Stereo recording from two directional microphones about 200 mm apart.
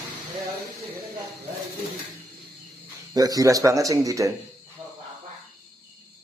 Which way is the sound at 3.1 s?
20° right (ahead or behind).